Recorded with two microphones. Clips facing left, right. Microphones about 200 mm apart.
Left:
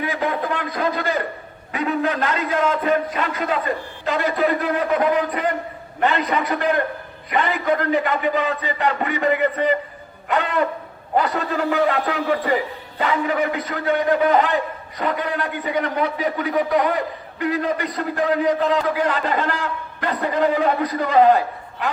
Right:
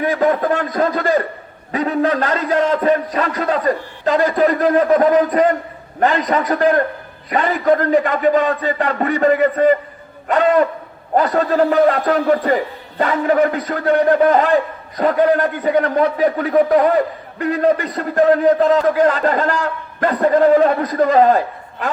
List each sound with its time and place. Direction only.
0.0 s a man's voice: 45° right (ahead or behind)